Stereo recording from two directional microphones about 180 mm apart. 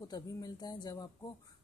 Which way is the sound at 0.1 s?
20° left (ahead or behind).